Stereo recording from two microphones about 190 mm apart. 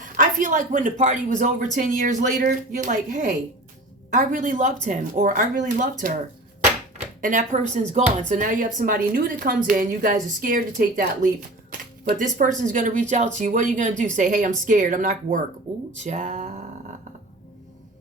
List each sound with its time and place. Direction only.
0.2 s a woman's voice: 45° right (ahead or behind)
7.2 s a woman's voice: 45° right (ahead or behind)
11.7 s a sound: 45° right (ahead or behind)
12.6 s a woman's voice: 45° right (ahead or behind)